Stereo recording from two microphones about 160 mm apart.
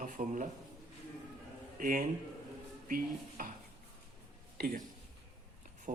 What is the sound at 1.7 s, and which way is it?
A man's voice, 55° right (ahead or behind).